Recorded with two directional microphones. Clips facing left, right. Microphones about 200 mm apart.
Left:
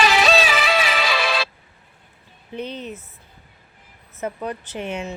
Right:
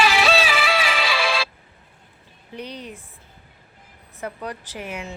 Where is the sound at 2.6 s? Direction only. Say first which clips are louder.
Left 4 dB; 25° left (ahead or behind).